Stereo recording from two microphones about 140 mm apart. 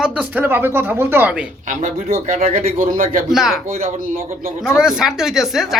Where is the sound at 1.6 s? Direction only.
70° right (ahead or behind).